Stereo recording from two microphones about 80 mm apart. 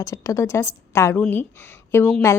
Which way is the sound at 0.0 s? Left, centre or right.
Left.